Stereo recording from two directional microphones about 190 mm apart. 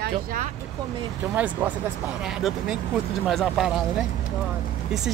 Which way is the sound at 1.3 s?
10° right (ahead or behind).